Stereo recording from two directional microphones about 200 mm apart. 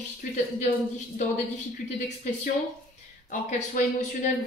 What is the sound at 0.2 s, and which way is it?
Speech, 35° left (ahead or behind).